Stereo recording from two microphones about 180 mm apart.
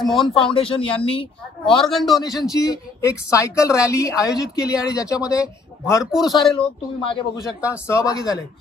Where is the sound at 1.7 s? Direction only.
Centre (ahead or behind).